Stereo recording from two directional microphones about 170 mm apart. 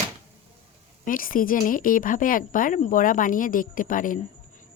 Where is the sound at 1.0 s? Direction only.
55° left (ahead or behind).